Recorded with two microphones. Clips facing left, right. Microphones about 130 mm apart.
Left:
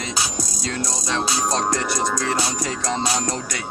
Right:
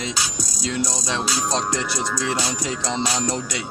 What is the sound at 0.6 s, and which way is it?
Music, 15° right (ahead or behind).